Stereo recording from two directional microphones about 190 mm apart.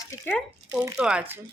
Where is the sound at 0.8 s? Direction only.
5° right (ahead or behind).